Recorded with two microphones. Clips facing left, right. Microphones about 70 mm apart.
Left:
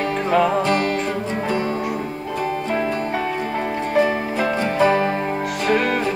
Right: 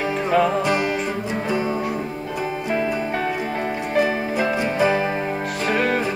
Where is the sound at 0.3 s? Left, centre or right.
Centre.